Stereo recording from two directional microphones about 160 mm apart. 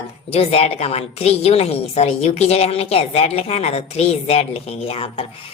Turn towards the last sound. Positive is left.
turn(degrees=35)  # may be behind; listen again after turning